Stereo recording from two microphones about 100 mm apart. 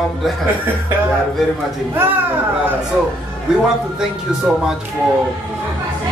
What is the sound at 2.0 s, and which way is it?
Speech, 20° right (ahead or behind).